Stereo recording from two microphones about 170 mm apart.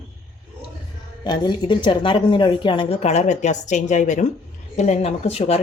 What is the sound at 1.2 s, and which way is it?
Speech, 25° left (ahead or behind).